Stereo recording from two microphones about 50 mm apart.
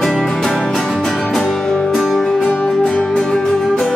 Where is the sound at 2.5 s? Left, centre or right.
Left.